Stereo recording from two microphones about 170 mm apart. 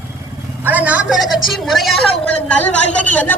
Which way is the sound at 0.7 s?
10° right (ahead or behind).